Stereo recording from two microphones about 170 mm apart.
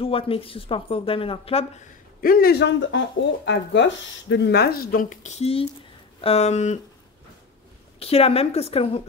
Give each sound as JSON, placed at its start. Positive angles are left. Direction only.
{"t": 0.0, "sound": "speech", "side_deg": 35}
{"t": 2.2, "sound": "speech", "side_deg": 60}
{"t": 8.0, "sound": "speech", "side_deg": 35}